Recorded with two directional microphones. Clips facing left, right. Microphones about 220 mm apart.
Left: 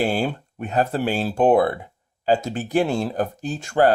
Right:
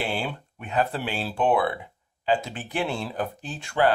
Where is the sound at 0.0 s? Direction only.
45° left (ahead or behind).